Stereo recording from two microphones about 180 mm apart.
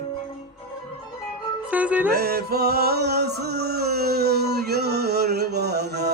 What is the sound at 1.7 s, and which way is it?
Music, 10° right (ahead or behind).